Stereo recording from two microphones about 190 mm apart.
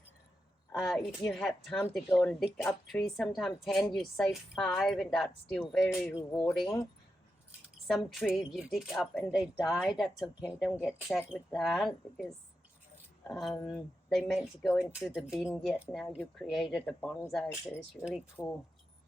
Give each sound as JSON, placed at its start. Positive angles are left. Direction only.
{"t": 0.7, "sound": "a woman's voice", "side_deg": 0}
{"t": 7.9, "sound": "a woman's voice", "side_deg": 0}
{"t": 13.2, "sound": "speech", "side_deg": 0}
{"t": 13.5, "sound": "speech", "side_deg": 20}
{"t": 13.7, "sound": "a woman's voice", "side_deg": 0}